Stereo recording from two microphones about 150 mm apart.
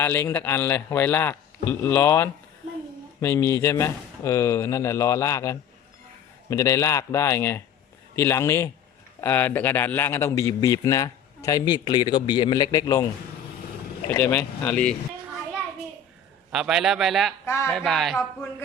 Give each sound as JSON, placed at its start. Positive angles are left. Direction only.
{"t": 0.0, "sound": "a man's voice", "side_deg": 15}
{"t": 14.1, "sound": "a man's voice", "side_deg": 15}
{"t": 16.5, "sound": "a man's voice", "side_deg": -5}
{"t": 17.4, "sound": "speech", "side_deg": 20}
{"t": 17.7, "sound": "a man's voice", "side_deg": 0}